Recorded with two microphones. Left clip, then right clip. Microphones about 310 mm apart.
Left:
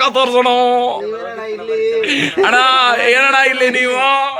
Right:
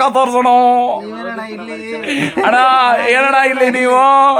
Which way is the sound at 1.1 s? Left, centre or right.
Centre.